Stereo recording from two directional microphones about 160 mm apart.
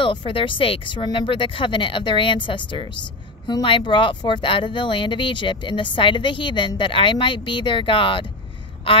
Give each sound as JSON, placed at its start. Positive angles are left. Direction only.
{"t": 0.0, "sound": "speech", "side_deg": 30}